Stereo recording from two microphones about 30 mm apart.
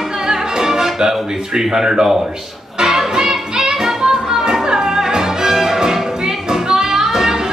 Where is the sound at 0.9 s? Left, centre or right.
Right.